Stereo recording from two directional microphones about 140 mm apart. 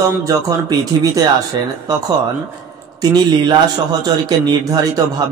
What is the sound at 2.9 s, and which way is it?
A man's voice, 30° right (ahead or behind).